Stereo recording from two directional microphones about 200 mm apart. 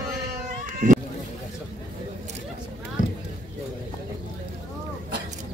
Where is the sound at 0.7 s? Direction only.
40° right (ahead or behind).